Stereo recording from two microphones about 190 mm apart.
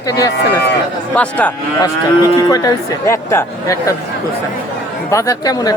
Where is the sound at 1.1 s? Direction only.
10° left (ahead or behind).